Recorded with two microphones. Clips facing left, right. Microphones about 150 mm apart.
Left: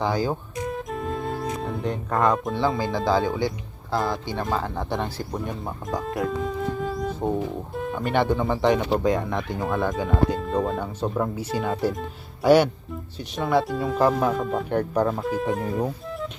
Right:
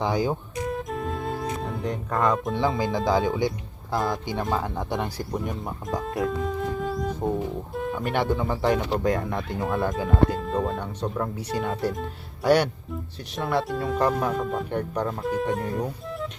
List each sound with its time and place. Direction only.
0.0 s speech: 20° right (ahead or behind)
0.5 s music: centre (ahead or behind)
2.3 s speech: centre (ahead or behind)
2.7 s speech: 15° right (ahead or behind); by 16.3 s centre (ahead or behind)